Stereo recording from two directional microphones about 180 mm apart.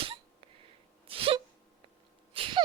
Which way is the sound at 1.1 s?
30° right (ahead or behind).